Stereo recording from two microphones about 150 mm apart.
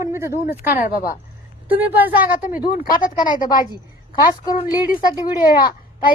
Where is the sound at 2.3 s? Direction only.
65° left (ahead or behind).